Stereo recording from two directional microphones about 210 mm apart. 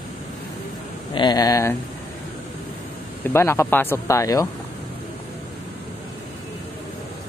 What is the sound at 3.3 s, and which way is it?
Speech, 10° left (ahead or behind).